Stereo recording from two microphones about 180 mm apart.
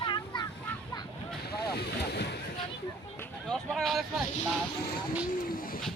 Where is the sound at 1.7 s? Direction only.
65° left (ahead or behind).